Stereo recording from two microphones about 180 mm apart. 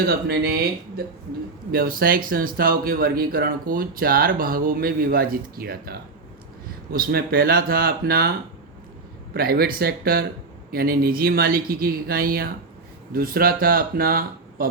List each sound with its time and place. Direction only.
0.0 s speech: 60° right (ahead or behind)
6.9 s speech: 55° right (ahead or behind)
9.3 s speech: 55° right (ahead or behind)